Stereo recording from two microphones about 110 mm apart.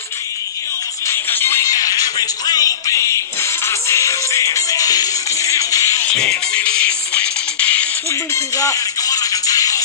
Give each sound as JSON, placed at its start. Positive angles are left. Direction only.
{"t": 1.0, "sound": "music", "side_deg": 20}
{"t": 1.7, "sound": "music", "side_deg": 30}
{"t": 6.0, "sound": "music", "side_deg": 10}
{"t": 8.5, "sound": "music", "side_deg": 30}